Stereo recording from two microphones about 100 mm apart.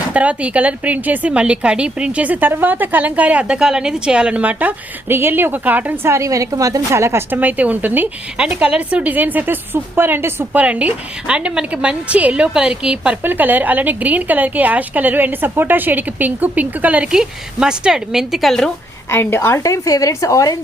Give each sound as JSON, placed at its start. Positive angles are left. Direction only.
{"t": 0.1, "sound": "a woman's voice", "side_deg": -15}
{"t": 6.1, "sound": "a woman's voice", "side_deg": -30}
{"t": 19.1, "sound": "a woman's voice", "side_deg": 25}